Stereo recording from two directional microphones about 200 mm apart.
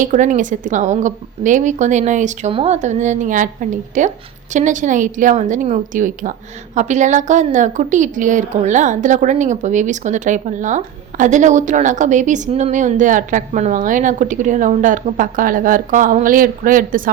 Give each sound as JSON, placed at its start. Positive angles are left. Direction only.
{"t": 0.0, "sound": "a woman's voice", "side_deg": -40}